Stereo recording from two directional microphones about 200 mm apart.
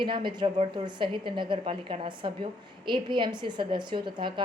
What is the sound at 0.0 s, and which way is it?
A woman's voice, 25° right (ahead or behind).